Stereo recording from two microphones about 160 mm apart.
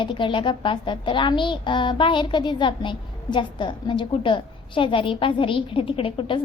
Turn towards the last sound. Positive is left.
turn(degrees=35)  # may be behind; listen again after turning